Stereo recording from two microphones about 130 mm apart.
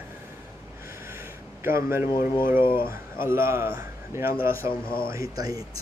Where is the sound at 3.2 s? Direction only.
20° right (ahead or behind).